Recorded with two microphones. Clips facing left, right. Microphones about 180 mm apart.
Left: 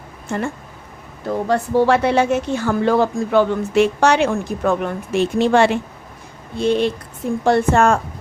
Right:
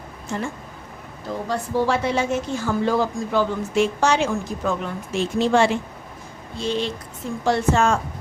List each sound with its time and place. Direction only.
0.3 s a woman's voice: 60° left (ahead or behind)